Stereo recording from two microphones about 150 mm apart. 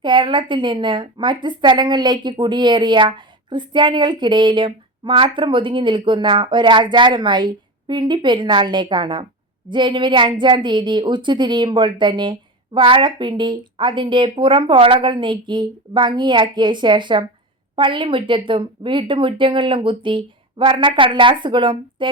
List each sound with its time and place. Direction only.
0.0 s a woman's voice: 30° right (ahead or behind)